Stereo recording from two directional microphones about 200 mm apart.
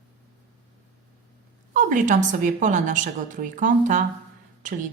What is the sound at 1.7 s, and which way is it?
A woman's voice, 40° right (ahead or behind).